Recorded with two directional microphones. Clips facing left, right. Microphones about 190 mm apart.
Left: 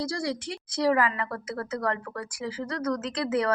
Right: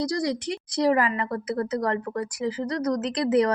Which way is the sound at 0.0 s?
20° right (ahead or behind).